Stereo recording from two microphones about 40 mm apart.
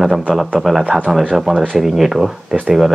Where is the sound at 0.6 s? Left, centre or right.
Centre.